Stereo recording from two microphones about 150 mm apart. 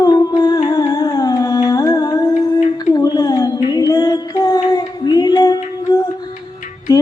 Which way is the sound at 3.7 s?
25° left (ahead or behind).